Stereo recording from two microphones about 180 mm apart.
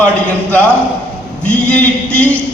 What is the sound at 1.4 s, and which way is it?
Speech, 5° left (ahead or behind).